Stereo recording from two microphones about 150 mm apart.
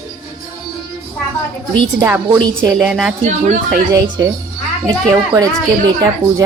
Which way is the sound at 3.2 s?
55° right (ahead or behind).